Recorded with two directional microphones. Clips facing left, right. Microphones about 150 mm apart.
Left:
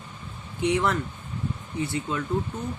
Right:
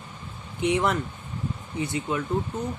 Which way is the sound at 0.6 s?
20° right (ahead or behind).